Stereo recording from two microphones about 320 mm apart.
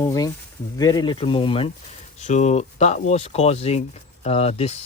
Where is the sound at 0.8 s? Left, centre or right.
Centre.